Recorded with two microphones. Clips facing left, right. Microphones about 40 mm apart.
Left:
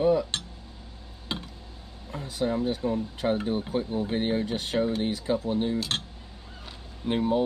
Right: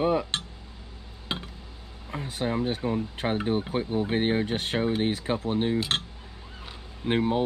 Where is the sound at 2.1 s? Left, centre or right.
Right.